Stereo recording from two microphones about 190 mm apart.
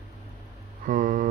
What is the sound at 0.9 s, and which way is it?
Speech, 45° right (ahead or behind).